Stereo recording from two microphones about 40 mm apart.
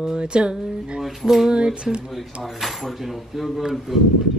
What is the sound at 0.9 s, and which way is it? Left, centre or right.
Speech, centre.